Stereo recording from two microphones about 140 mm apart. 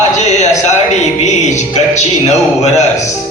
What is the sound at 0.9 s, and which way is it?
A man's voice, 55° left (ahead or behind).